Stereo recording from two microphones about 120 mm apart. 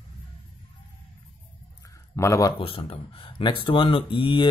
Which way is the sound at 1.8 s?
25° left (ahead or behind).